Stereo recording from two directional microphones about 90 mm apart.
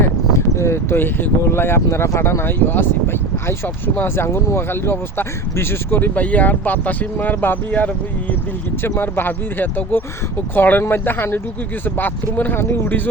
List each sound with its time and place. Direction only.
0.0 s speech: 30° left (ahead or behind)